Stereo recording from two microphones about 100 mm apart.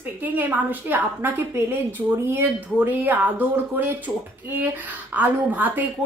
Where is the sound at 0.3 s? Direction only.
20° right (ahead or behind).